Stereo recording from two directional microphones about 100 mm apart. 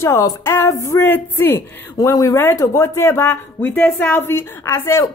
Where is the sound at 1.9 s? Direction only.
35° left (ahead or behind).